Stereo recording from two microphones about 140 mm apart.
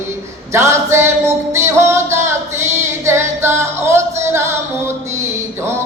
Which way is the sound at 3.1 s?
20° right (ahead or behind).